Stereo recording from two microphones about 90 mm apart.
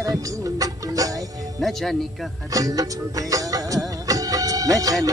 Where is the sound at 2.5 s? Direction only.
40° right (ahead or behind).